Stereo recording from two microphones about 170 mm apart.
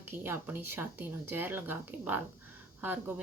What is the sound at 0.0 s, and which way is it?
Speech, 10° right (ahead or behind).